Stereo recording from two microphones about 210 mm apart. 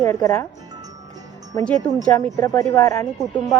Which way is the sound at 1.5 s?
15° left (ahead or behind).